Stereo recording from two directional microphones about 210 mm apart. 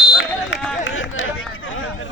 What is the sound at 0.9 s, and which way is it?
Chatter, 65° left (ahead or behind).